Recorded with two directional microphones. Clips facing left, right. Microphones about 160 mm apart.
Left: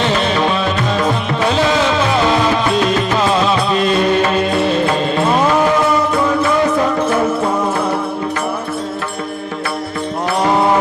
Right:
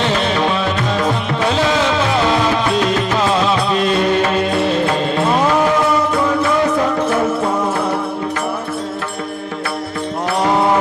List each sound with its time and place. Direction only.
0.0 s music: 10° left (ahead or behind)
10.2 s music: 10° left (ahead or behind)